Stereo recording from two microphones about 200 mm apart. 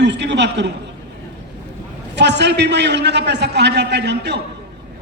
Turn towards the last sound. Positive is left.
turn(degrees=-60)  # may be behind; listen again after turning